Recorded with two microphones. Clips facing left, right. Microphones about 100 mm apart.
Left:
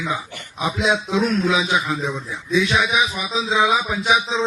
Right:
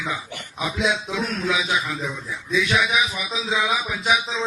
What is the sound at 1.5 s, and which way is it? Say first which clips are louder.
Speech: left 4 dB; 30° left (ahead or behind).